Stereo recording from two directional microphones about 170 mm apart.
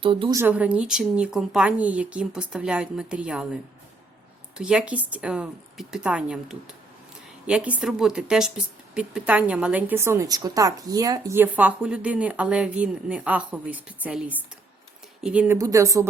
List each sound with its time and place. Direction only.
0.0 s a woman's voice: 30° right (ahead or behind)
0.3 s a woman's voice: 10° right (ahead or behind)
15.5 s a woman's voice: 20° right (ahead or behind)